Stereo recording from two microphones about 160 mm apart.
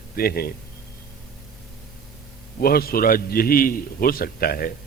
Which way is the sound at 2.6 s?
70° left (ahead or behind).